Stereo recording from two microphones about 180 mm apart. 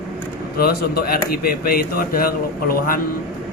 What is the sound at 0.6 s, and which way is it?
Speech, 60° left (ahead or behind).